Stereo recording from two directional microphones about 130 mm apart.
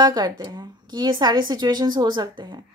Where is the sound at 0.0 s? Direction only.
30° right (ahead or behind).